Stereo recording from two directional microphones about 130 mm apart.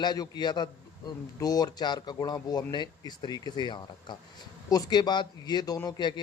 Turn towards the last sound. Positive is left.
turn(degrees=35)  # may be behind; listen again after turning